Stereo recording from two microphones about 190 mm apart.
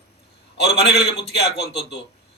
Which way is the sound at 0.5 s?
60° left (ahead or behind).